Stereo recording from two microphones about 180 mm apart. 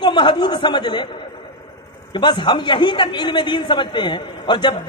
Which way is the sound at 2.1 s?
25° left (ahead or behind).